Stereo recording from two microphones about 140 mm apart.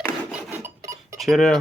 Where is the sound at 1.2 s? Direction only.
Centre (ahead or behind).